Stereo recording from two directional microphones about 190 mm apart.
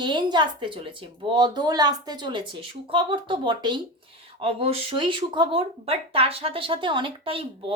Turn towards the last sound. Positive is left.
turn(degrees=-25)  # may be behind; listen again after turning